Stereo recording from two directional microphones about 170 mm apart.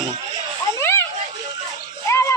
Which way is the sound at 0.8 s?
15° left (ahead or behind).